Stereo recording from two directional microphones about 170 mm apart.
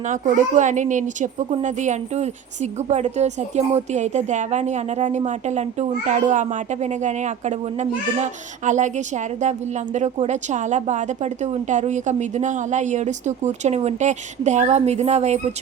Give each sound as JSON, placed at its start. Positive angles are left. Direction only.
{"t": 0.1, "sound": "a woman's voice", "side_deg": -45}